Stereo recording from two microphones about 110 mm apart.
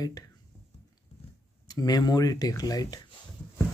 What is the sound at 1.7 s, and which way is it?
Speech, 35° left (ahead or behind).